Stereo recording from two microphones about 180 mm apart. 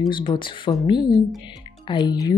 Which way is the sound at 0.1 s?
25° left (ahead or behind).